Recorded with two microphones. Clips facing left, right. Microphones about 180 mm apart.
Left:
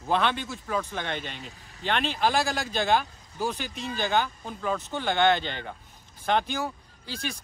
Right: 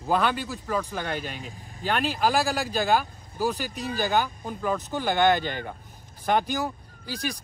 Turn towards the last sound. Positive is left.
turn(degrees=-40)  # may be behind; listen again after turning